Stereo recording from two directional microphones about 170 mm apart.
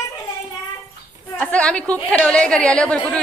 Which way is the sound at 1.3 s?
5° left (ahead or behind).